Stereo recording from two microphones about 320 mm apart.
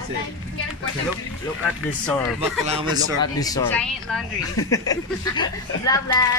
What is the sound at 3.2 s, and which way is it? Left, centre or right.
Speech, centre.